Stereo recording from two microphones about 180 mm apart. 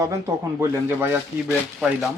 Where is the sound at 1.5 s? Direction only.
Centre (ahead or behind).